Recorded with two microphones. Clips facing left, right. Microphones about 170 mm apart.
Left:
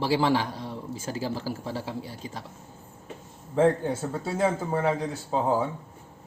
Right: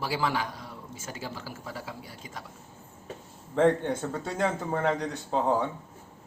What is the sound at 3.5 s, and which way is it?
Speech, 5° left (ahead or behind).